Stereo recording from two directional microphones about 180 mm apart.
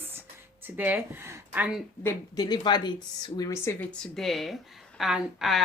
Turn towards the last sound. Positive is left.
turn(degrees=0)  # may be behind; listen again after turning